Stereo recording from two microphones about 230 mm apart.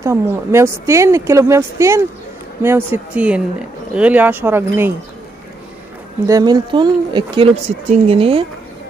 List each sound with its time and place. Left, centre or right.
0.0 s a woman's voice: centre
6.2 s speech: centre